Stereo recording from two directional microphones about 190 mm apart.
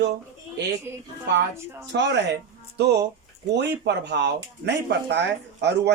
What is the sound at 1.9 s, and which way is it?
A man's voice, 65° right (ahead or behind).